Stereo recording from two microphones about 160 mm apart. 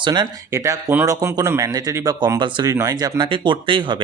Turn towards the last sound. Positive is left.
turn(degrees=-30)  # may be behind; listen again after turning